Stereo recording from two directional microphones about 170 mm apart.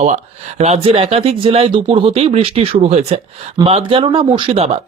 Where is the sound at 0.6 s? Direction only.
35° right (ahead or behind).